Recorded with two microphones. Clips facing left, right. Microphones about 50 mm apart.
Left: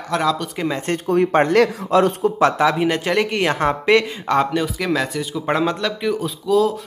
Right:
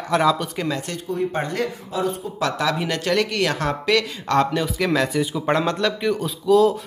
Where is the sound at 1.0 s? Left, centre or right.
Left.